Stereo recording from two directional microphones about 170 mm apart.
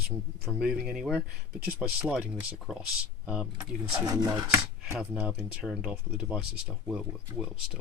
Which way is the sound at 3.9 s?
20° right (ahead or behind).